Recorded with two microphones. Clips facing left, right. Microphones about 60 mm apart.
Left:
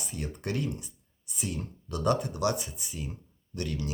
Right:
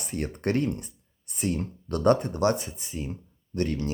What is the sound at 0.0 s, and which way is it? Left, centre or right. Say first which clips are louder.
Speech: right 7 dB; right.